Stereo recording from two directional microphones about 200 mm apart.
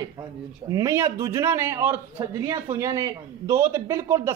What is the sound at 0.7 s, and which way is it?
A man's voice, 15° right (ahead or behind).